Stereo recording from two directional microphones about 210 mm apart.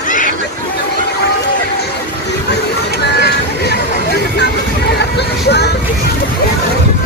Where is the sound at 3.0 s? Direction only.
50° left (ahead or behind).